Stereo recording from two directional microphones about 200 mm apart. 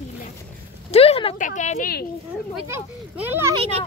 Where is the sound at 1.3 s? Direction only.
40° left (ahead or behind).